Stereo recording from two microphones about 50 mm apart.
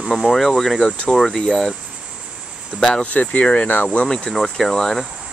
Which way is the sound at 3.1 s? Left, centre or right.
Left.